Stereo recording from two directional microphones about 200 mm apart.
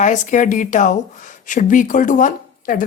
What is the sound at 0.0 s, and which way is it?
Speech, 40° left (ahead or behind).